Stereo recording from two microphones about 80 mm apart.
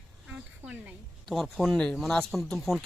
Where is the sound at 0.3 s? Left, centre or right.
Centre.